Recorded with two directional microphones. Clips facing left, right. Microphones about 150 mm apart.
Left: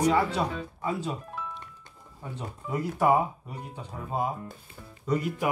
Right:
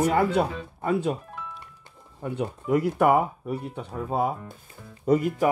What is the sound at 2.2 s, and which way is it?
Speech, 60° right (ahead or behind).